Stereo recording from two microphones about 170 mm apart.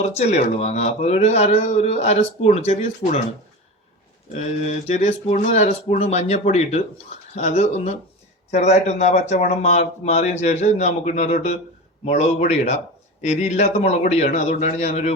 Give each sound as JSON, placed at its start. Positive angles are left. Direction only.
{"t": 0.0, "sound": "speech", "side_deg": 40}
{"t": 4.3, "sound": "speech", "side_deg": 40}